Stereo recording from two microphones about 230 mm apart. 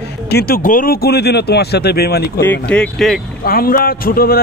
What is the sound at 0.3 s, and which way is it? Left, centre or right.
Speech, left.